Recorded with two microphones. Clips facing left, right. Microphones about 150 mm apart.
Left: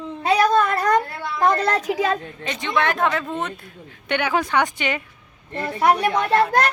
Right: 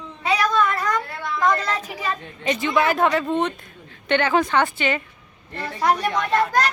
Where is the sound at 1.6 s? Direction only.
75° left (ahead or behind).